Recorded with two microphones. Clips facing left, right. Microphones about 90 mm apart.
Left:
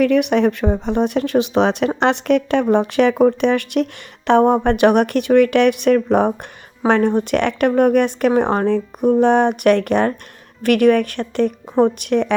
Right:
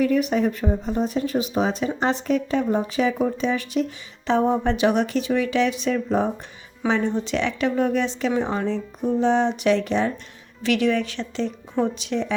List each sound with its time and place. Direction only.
0.0 s speech: 75° left (ahead or behind)